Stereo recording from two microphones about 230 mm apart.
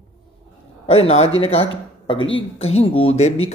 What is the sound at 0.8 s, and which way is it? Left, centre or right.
A man's voice, left.